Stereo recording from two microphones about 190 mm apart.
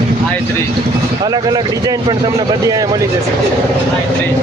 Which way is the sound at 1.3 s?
20° right (ahead or behind).